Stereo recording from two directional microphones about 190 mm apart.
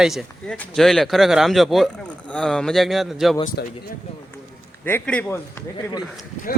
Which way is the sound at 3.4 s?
45° left (ahead or behind).